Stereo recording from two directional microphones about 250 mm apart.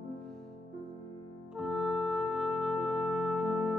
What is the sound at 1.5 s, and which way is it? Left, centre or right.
Music, centre.